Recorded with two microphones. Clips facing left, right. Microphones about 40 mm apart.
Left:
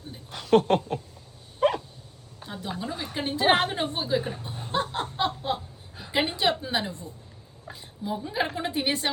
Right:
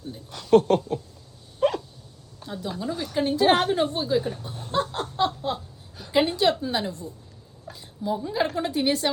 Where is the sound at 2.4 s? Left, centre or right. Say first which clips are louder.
Right 2 dB; left.